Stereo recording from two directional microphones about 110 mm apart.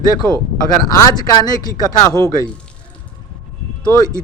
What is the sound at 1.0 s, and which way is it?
Speech, 35° left (ahead or behind).